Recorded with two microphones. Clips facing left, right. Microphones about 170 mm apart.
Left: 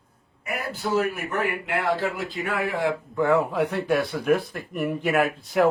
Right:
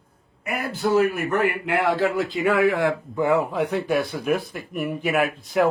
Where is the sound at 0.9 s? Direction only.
55° right (ahead or behind).